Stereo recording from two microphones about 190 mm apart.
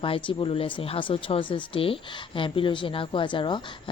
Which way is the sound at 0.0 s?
25° left (ahead or behind).